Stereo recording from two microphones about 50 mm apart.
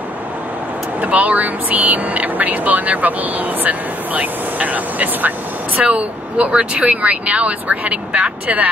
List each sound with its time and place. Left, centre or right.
1.0 s speech: right